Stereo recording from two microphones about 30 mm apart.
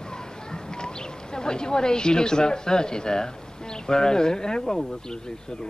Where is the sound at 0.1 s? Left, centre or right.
Left.